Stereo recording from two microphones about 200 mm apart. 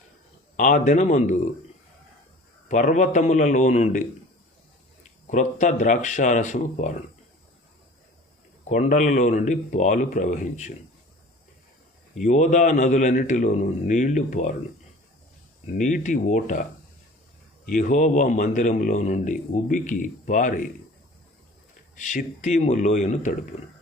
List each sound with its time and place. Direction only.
0.5 s a man's voice: 40° left (ahead or behind)
2.6 s a man's voice: 40° left (ahead or behind)
5.3 s a man's voice: 35° left (ahead or behind)
8.7 s a man's voice: 40° left (ahead or behind)
12.2 s a man's voice: 40° left (ahead or behind)
15.8 s a man's voice: 40° left (ahead or behind)
17.7 s a man's voice: 40° left (ahead or behind)
21.9 s a man's voice: 40° left (ahead or behind)